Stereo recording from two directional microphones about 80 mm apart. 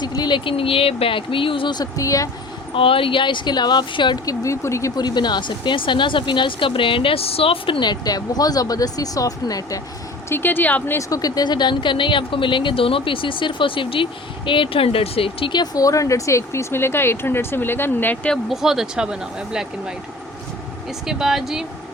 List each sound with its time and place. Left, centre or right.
0.0 s speech: left
2.7 s speech: left
4.3 s speech: left
4.9 s speech: left
7.7 s speech: left
10.2 s speech: left
10.9 s speech: left
15.4 s speech: left; by 18.3 s centre
18.4 s speech: centre
21.1 s speech: centre